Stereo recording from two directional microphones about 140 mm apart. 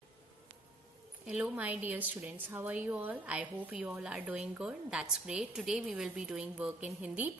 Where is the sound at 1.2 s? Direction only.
10° right (ahead or behind).